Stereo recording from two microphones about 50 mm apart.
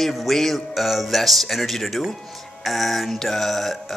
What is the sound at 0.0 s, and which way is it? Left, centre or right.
A man's voice, centre.